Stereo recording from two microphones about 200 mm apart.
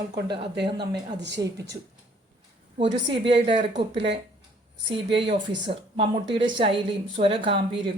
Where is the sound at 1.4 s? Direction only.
20° right (ahead or behind).